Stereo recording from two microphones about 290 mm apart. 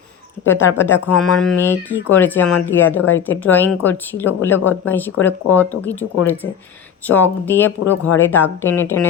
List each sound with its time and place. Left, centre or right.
0.8 s speech: centre
3.0 s speech: left
3.2 s speech: centre